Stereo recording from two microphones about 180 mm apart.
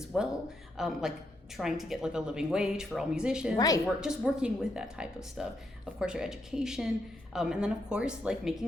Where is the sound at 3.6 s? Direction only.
20° left (ahead or behind).